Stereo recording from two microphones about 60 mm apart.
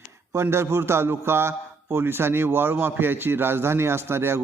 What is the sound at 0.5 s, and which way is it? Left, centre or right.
A man's voice, right.